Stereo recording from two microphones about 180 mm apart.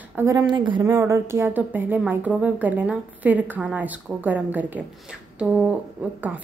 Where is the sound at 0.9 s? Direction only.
15° right (ahead or behind).